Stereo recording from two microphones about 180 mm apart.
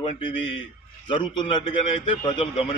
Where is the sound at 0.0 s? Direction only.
30° left (ahead or behind).